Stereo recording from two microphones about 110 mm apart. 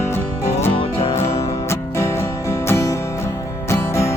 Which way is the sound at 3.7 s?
25° left (ahead or behind).